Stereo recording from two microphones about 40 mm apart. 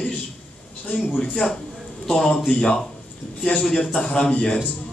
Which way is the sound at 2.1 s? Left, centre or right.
Centre.